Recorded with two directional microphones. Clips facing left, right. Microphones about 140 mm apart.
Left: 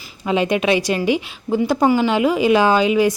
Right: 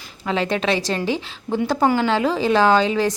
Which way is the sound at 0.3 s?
15° left (ahead or behind).